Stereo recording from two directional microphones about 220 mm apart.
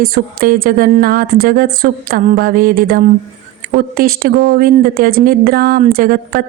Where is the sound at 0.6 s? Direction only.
40° right (ahead or behind).